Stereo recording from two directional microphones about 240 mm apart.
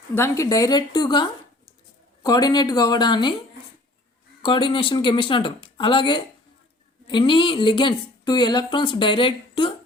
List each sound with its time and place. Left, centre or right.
0.1 s speech: centre
4.4 s speech: centre